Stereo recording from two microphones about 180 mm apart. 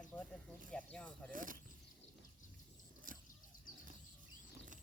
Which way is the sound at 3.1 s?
50° right (ahead or behind).